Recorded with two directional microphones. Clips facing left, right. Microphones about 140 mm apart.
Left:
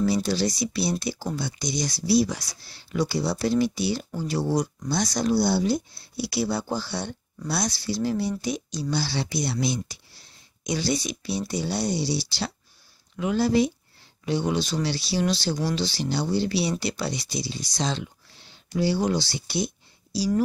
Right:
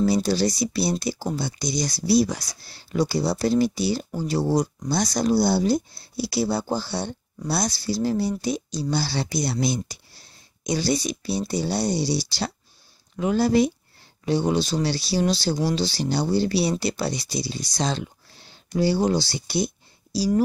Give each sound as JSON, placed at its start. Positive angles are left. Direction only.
{"t": 0.0, "sound": "speech", "side_deg": -40}
{"t": 14.2, "sound": "speech", "side_deg": -35}